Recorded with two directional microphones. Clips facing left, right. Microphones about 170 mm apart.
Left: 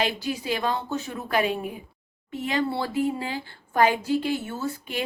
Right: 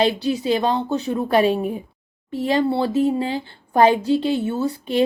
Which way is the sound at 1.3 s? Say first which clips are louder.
Right 7 dB; 30° right (ahead or behind).